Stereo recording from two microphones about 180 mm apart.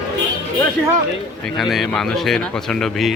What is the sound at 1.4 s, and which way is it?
Speech, centre (ahead or behind).